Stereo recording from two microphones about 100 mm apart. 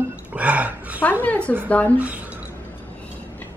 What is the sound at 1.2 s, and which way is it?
Speech, 10° left (ahead or behind).